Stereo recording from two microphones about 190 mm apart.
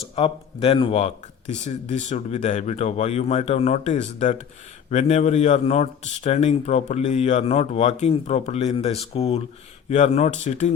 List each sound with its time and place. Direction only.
0.2 s a man's voice: 30° left (ahead or behind)